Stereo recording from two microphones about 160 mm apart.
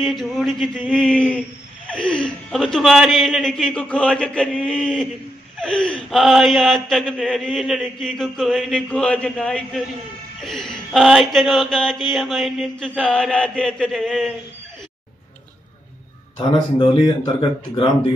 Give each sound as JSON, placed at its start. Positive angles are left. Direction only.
{"t": 0.0, "sound": "a man's voice", "side_deg": 0}
{"t": 16.7, "sound": "speech", "side_deg": 25}